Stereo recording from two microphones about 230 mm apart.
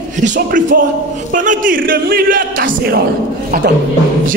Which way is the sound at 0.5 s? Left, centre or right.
Right.